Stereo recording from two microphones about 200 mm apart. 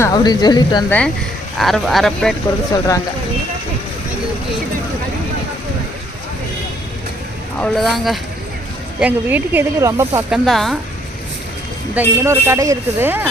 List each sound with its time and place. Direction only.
0.0 s speech: 20° left (ahead or behind)
1.5 s speech: centre (ahead or behind)
2.7 s speech: 15° left (ahead or behind)
7.6 s speech: centre (ahead or behind)
10.2 s speech: centre (ahead or behind)
11.9 s speech: 15° right (ahead or behind)